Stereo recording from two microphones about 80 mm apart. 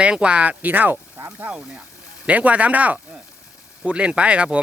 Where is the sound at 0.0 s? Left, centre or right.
Centre.